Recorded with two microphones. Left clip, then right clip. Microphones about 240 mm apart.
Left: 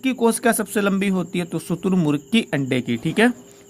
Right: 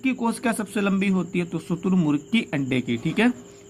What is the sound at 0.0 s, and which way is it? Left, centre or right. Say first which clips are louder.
Speech: left 6 dB; left.